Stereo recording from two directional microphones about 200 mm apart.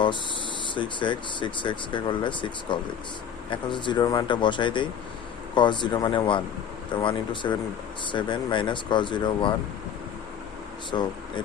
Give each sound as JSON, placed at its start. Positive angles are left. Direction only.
{"t": 0.7, "sound": "speech", "side_deg": 25}
{"t": 10.9, "sound": "speech", "side_deg": 15}